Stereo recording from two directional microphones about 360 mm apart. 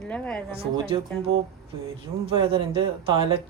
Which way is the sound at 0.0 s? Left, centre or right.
Centre.